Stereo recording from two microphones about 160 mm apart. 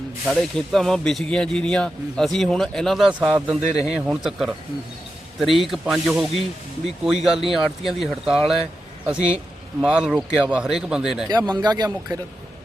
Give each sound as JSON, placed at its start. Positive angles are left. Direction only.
{"t": 0.3, "sound": "speech", "side_deg": 5}
{"t": 3.6, "sound": "speech", "side_deg": -45}
{"t": 3.8, "sound": "speech", "side_deg": -5}
{"t": 11.3, "sound": "speech", "side_deg": -25}